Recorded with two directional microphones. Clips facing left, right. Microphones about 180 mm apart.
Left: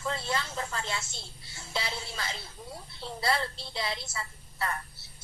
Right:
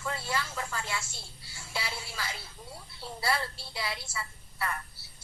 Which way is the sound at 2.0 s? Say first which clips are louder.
Left 1 dB; 25° left (ahead or behind).